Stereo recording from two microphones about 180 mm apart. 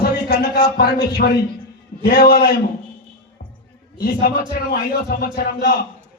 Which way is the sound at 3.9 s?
55° left (ahead or behind).